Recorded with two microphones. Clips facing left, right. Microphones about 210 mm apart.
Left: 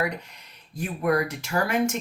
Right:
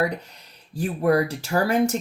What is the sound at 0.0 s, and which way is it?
Speech, 35° right (ahead or behind).